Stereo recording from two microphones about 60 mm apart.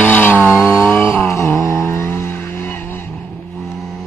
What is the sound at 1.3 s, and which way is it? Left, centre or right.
Vehicle, left.